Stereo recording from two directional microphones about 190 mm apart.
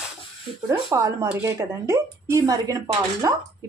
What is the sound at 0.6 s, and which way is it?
Speech, 15° right (ahead or behind).